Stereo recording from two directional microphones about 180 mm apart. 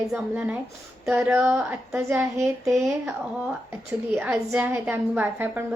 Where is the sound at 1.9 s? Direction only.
15° right (ahead or behind).